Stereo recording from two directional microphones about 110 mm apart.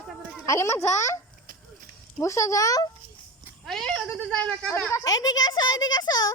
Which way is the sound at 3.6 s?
5° left (ahead or behind).